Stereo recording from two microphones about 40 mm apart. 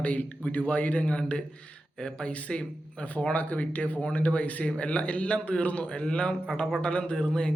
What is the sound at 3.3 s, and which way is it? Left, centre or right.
A man's voice, left.